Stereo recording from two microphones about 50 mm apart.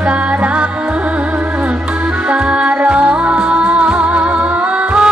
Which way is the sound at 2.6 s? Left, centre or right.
Right.